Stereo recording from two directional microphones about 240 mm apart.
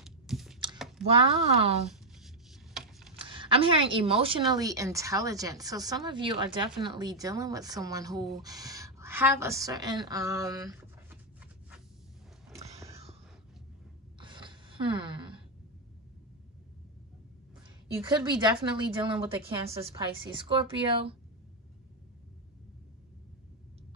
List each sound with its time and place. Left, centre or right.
0.0 s computer keyboard: centre
0.7 s a sound: centre
1.0 s speech: right
2.1 s a sound: centre
3.2 s a woman's voice: right
12.5 s biting: centre
14.2 s gasp: centre
17.9 s speech: centre